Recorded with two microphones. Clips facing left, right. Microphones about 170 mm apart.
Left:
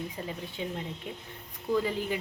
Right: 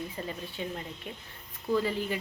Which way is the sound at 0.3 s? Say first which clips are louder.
Left 1 dB; 15° left (ahead or behind).